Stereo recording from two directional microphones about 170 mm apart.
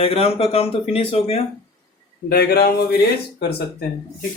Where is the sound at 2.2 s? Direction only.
65° left (ahead or behind).